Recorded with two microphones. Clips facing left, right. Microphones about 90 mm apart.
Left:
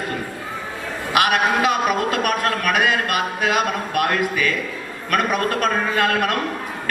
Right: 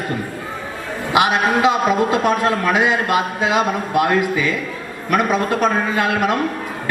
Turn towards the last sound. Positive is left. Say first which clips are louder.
# right 2 dB
turn(degrees=-20)  # may be behind; listen again after turning